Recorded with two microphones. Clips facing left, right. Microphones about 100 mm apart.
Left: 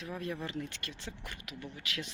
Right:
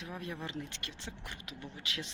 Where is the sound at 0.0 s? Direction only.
15° right (ahead or behind).